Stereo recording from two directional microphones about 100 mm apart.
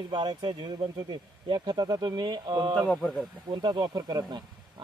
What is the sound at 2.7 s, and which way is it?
Speech, 5° left (ahead or behind).